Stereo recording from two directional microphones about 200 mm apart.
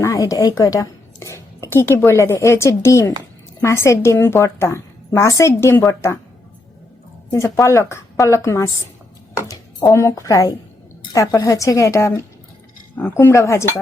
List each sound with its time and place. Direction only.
0.0 s a woman's voice: 15° left (ahead or behind)
7.3 s a woman's voice: 15° left (ahead or behind)